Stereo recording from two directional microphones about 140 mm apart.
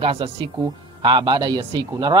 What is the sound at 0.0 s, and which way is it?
Speech, 40° right (ahead or behind).